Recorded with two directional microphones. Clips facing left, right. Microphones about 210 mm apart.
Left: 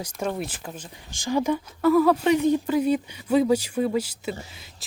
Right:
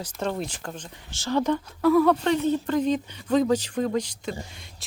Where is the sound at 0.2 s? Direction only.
5° left (ahead or behind).